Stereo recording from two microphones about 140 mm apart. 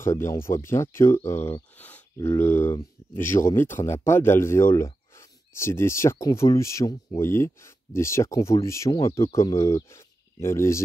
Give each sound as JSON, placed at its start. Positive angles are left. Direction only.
{"t": 0.0, "sound": "speech", "side_deg": 20}